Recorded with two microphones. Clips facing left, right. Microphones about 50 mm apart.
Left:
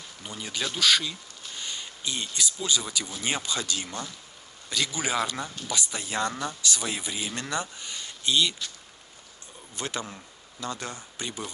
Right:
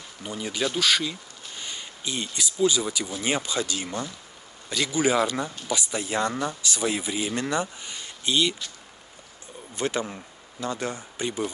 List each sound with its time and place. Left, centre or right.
0.2 s speech: centre
9.8 s speech: right